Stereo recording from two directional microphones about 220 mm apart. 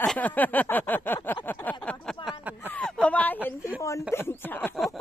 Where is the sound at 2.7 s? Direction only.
5° left (ahead or behind).